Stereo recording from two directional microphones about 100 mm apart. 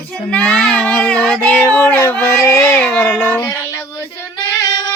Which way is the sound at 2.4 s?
30° left (ahead or behind).